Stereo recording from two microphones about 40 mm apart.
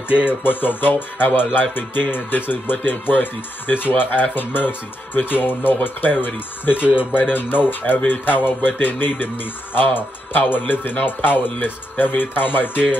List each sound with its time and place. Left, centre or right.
0.3 s speech: left